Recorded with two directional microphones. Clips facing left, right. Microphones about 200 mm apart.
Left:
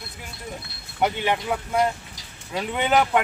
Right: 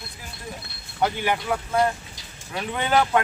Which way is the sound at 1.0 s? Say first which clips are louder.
Left 1 dB; 20° left (ahead or behind).